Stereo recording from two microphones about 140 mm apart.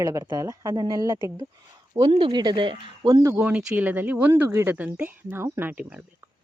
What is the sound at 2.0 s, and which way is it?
Speech, 40° right (ahead or behind).